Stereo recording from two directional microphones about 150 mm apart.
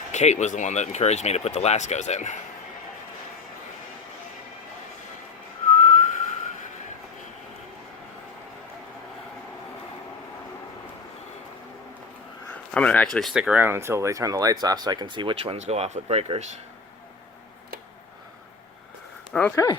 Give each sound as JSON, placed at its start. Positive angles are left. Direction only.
{"t": 0.1, "sound": "speech", "side_deg": 50}
{"t": 5.8, "sound": "whistling", "side_deg": 55}
{"t": 12.7, "sound": "speech", "side_deg": 10}
{"t": 19.3, "sound": "speech", "side_deg": 10}